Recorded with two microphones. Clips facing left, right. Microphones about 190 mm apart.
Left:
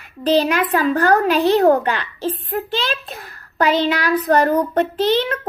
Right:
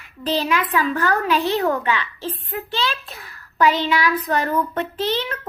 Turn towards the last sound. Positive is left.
turn(degrees=45)  # may be behind; listen again after turning